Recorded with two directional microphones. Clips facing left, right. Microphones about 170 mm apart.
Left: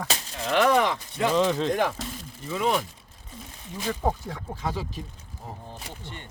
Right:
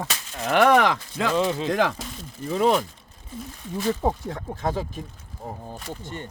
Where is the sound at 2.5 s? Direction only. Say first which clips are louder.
Right 5 dB; 40° right (ahead or behind).